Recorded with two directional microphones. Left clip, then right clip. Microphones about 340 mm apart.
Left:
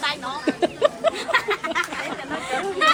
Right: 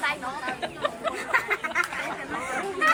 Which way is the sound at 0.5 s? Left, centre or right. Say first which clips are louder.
Left 9 dB; centre.